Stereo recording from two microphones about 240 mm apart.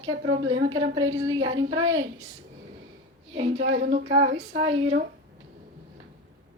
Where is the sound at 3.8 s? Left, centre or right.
Right.